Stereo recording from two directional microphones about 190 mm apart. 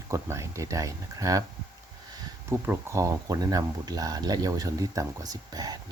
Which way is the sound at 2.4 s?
10° right (ahead or behind).